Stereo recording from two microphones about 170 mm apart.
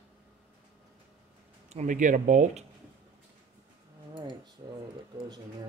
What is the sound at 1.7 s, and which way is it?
Speech, 45° right (ahead or behind).